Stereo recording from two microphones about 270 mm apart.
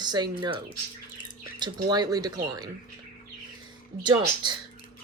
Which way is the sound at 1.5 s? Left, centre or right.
Centre.